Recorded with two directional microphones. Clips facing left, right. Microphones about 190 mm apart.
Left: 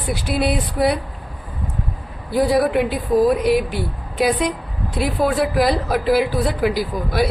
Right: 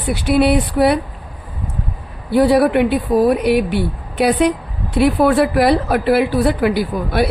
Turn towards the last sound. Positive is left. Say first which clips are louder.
# right 3 dB
turn(degrees=-60)  # may be behind; listen again after turning